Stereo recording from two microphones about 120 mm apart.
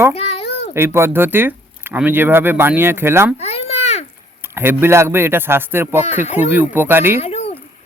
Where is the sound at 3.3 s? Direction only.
60° left (ahead or behind).